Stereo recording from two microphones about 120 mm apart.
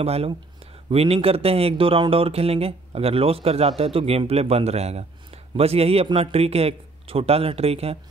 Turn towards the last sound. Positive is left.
turn(degrees=-55)  # may be behind; listen again after turning